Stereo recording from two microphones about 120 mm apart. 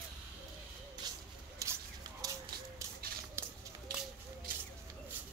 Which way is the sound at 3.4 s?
20° right (ahead or behind).